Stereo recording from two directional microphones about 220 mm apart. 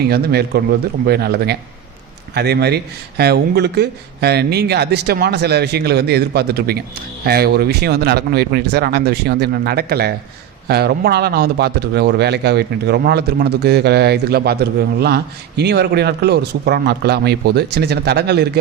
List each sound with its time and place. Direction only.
0.0 s a man's voice: 45° right (ahead or behind)